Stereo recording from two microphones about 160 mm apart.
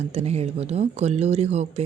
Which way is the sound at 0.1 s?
40° right (ahead or behind).